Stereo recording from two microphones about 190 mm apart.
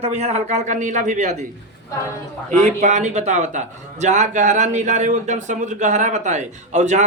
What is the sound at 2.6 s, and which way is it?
A man's voice, 40° right (ahead or behind).